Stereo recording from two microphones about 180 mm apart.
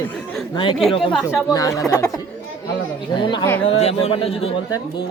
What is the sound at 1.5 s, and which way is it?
Speech, 20° left (ahead or behind).